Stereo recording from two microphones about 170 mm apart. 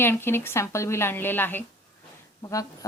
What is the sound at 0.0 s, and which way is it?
Speech, 15° left (ahead or behind).